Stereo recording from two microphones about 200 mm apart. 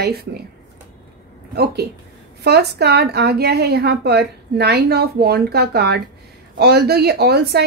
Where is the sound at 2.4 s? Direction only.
55° right (ahead or behind).